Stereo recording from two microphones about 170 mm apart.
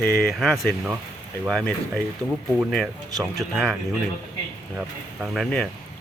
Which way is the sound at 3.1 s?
20° right (ahead or behind).